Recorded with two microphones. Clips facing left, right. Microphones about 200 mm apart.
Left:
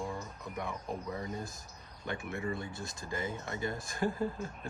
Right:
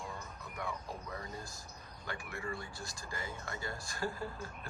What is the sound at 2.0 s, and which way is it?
Speech, 20° left (ahead or behind).